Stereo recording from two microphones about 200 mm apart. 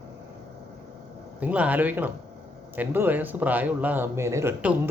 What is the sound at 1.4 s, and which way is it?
Speech, 5° right (ahead or behind).